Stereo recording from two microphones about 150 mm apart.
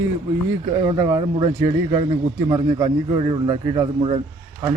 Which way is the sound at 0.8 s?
20° right (ahead or behind).